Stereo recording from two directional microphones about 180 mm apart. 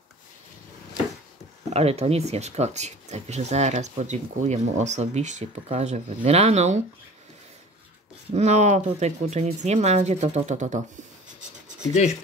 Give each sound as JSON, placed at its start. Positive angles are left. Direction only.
{"t": 1.7, "sound": "speech", "side_deg": -35}
{"t": 8.3, "sound": "speech", "side_deg": -40}
{"t": 11.9, "sound": "speech", "side_deg": 40}